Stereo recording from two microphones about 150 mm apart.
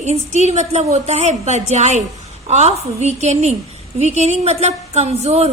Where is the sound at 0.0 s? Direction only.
50° right (ahead or behind).